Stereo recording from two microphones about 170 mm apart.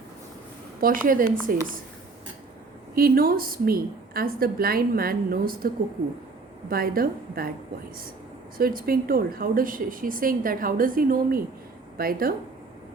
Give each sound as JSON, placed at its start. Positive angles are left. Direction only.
{"t": 0.8, "sound": "a woman's voice", "side_deg": -55}
{"t": 2.9, "sound": "a woman's voice", "side_deg": -60}
{"t": 8.5, "sound": "a woman's voice", "side_deg": -60}